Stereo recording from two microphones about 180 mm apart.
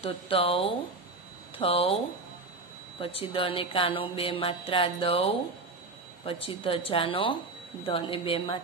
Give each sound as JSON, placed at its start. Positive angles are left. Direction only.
{"t": 0.0, "sound": "speech", "side_deg": 30}
{"t": 3.0, "sound": "speech", "side_deg": 30}
{"t": 6.4, "sound": "a woman's voice", "side_deg": 30}